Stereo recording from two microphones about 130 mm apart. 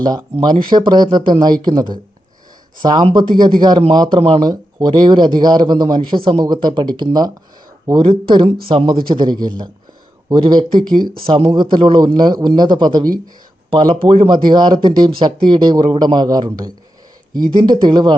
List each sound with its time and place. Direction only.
0.0 s a man's voice: 40° right (ahead or behind)